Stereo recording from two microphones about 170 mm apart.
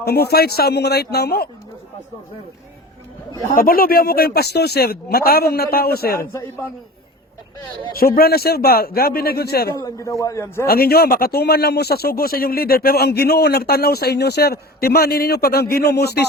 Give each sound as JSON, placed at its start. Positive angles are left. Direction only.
{"t": 0.0, "sound": "a man's voice", "side_deg": 70}
{"t": 3.5, "sound": "speech", "side_deg": 60}
{"t": 7.9, "sound": "speech", "side_deg": 60}
{"t": 9.8, "sound": "a man's voice", "side_deg": 20}
{"t": 10.7, "sound": "a man's voice", "side_deg": 65}